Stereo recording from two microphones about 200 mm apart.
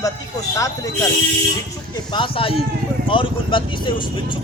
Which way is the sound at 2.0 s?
20° left (ahead or behind).